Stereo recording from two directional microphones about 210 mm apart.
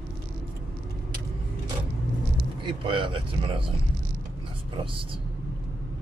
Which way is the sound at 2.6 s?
25° right (ahead or behind).